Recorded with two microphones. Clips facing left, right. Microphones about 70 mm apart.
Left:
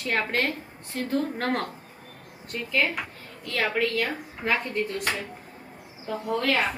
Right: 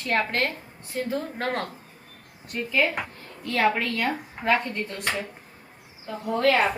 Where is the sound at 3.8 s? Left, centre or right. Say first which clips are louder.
Left 1 dB; centre.